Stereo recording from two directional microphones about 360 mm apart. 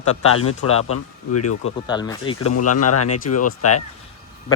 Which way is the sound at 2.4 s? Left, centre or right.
Left.